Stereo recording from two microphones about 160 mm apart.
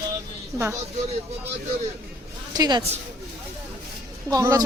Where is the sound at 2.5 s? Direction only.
25° right (ahead or behind).